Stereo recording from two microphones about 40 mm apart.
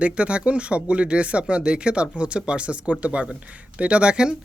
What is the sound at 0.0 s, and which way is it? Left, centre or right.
Speech, right.